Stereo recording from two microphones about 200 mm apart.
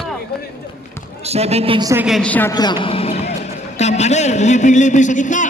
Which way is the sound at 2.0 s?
5° left (ahead or behind).